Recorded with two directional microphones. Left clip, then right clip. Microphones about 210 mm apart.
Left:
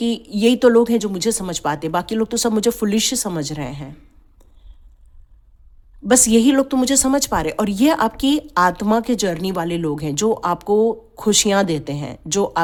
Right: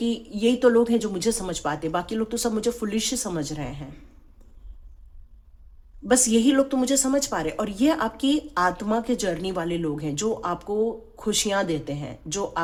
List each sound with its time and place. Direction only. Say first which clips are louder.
0.0 s speech: left 6 dB; 40° left (ahead or behind)
6.1 s a woman's voice: left 6 dB; 40° left (ahead or behind)